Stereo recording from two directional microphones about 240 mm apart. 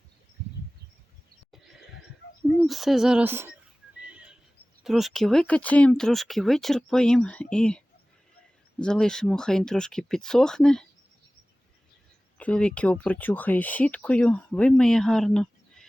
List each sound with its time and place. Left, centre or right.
2.6 s speech: centre
4.0 s a sound: centre
4.8 s speech: centre
12.4 s speech: centre